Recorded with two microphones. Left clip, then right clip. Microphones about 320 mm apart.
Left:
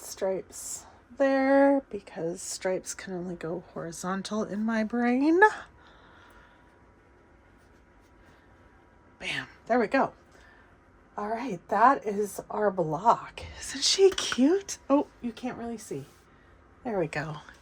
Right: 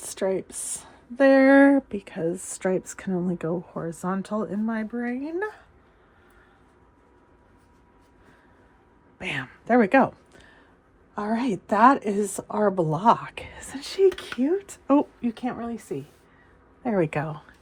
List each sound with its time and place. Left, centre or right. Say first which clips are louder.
0.0 s speech: right 4 dB; right
3.8 s speech: right 1 dB; centre; by 5.6 s left
9.2 s speech: right 3 dB; centre
11.2 s a woman's voice: right 5 dB; right
13.7 s speech: even; centre
15.4 s speech: right 1 dB; centre
17.2 s speech: right 4 dB; centre